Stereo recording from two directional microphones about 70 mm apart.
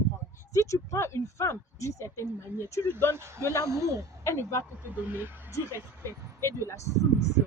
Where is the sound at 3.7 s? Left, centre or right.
Right.